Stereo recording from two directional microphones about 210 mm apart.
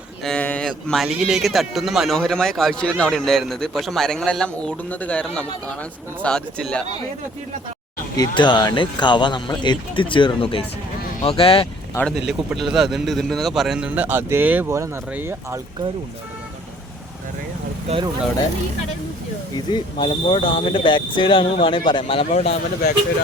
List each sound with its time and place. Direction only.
0.3 s speech: 5° left (ahead or behind)
8.1 s speech: 20° left (ahead or behind)
12.0 s speech: 15° left (ahead or behind)
12.5 s a man's voice: centre (ahead or behind)
17.8 s speech: 25° right (ahead or behind)
19.5 s speech: 20° left (ahead or behind)